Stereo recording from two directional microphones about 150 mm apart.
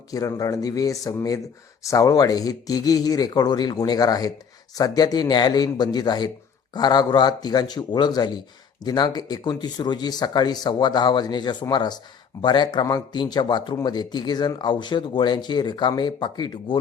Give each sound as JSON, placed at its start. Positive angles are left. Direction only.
{"t": 0.1, "sound": "speech", "side_deg": 25}